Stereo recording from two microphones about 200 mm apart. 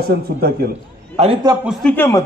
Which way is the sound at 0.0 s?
50° right (ahead or behind).